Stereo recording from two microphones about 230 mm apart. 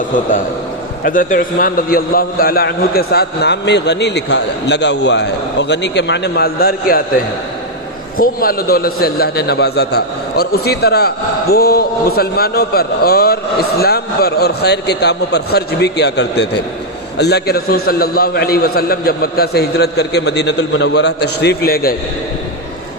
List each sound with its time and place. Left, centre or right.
1.0 s a man's voice: left
8.2 s a man's voice: left